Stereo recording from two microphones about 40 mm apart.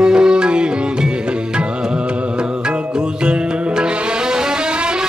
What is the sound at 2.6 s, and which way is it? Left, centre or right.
Music, right.